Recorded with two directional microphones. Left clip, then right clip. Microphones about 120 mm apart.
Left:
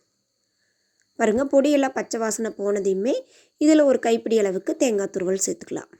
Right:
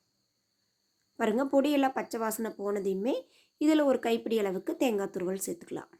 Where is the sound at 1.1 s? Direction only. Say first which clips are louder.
Left 8 dB; 30° left (ahead or behind).